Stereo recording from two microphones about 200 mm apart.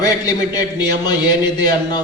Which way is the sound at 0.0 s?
20° left (ahead or behind).